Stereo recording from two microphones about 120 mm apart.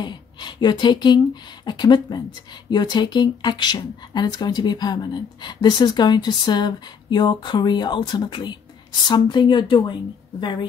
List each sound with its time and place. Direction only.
0.0 s speech: 40° left (ahead or behind)